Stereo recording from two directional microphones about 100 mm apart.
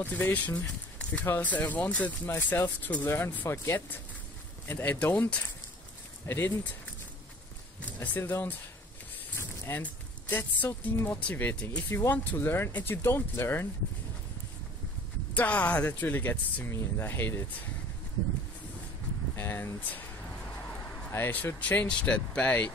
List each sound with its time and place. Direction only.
0.0 s speech: 15° left (ahead or behind)
8.0 s speech: 20° left (ahead or behind)
9.4 s a sound: 20° left (ahead or behind)
10.3 s speech: 20° left (ahead or behind)
15.3 s speech: 15° left (ahead or behind)
19.3 s speech: 25° left (ahead or behind)
21.1 s speech: 20° left (ahead or behind)